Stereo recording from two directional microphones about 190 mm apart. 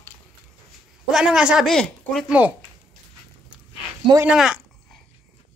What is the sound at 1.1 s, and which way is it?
Speech, 5° right (ahead or behind).